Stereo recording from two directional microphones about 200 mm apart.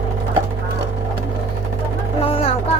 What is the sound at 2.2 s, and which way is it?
Vehicle, 30° left (ahead or behind).